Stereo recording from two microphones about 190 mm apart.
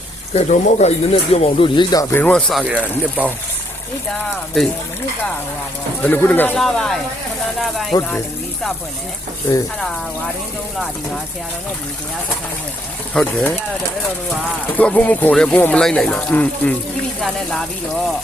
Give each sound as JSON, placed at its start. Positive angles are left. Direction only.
{"t": 0.3, "sound": "speech", "side_deg": 40}
{"t": 4.6, "sound": "speech", "side_deg": 0}
{"t": 6.0, "sound": "speech", "side_deg": 10}
{"t": 13.1, "sound": "speech", "side_deg": 5}
{"t": 14.8, "sound": "speech", "side_deg": 10}